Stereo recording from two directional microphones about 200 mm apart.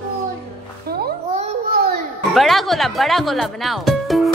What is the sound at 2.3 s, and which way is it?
Music, centre (ahead or behind).